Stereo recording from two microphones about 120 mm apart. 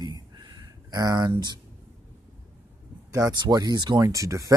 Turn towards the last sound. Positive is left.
turn(degrees=-25)  # may be behind; listen again after turning